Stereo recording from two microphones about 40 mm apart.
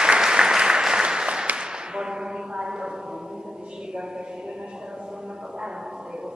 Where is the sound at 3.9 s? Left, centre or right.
Centre.